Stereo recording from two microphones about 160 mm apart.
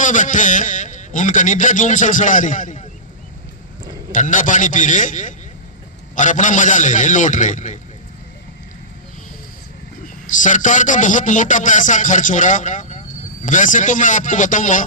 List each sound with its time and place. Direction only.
0.0 s speech: 55° left (ahead or behind)
4.1 s speech: 55° left (ahead or behind)
10.2 s speech: 55° left (ahead or behind)